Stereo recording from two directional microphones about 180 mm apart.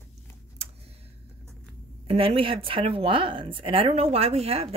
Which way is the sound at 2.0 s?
30° right (ahead or behind).